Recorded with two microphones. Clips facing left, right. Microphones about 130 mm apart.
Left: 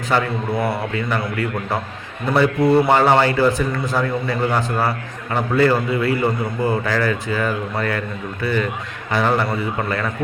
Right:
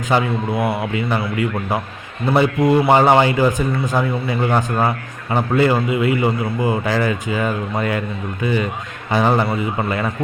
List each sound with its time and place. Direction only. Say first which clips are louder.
0.1 s speech: right 2 dB; 20° right (ahead or behind)
0.5 s a man's voice: even; centre (ahead or behind)
0.8 s a man's voice: right 2 dB; 15° right (ahead or behind)
2.3 s a man's voice: even; 20° right (ahead or behind)